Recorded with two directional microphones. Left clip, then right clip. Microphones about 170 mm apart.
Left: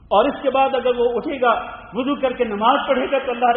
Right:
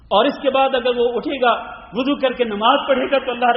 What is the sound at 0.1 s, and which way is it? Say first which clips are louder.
A man's voice: right 1 dB; 30° right (ahead or behind).